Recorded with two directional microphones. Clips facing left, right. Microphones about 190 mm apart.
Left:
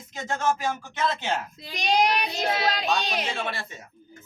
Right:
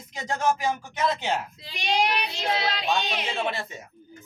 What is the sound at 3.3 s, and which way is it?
Speech, 20° right (ahead or behind).